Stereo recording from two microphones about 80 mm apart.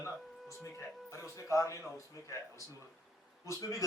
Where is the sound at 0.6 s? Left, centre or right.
Left.